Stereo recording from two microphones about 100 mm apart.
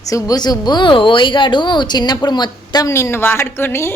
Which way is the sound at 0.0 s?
35° left (ahead or behind).